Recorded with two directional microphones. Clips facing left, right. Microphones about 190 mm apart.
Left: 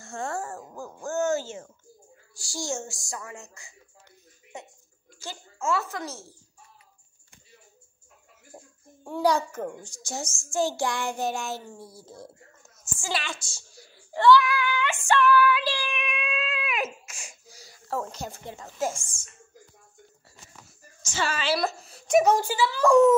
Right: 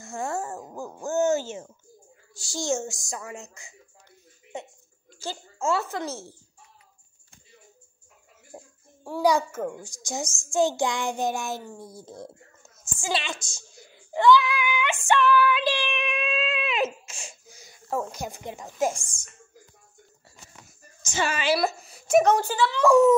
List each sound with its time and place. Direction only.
0.0 s a sound: 20° right (ahead or behind)
2.3 s speech: 20° right (ahead or behind)
5.2 s speech: 30° right (ahead or behind)
8.5 s a sound: 10° right (ahead or behind)
9.0 s a child's voice: 10° right (ahead or behind)
9.8 s a child's voice: 15° right (ahead or behind)
21.0 s a woman's voice: 15° right (ahead or behind)
22.2 s speech: 10° left (ahead or behind)
22.8 s a child's voice: 5° right (ahead or behind)